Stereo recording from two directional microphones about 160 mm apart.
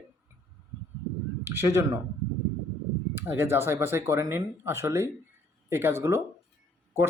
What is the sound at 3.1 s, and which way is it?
Speech, 15° right (ahead or behind).